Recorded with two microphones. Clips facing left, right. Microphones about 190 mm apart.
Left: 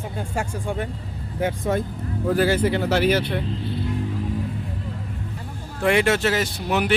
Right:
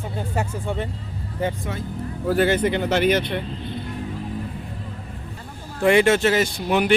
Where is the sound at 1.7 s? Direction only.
40° left (ahead or behind).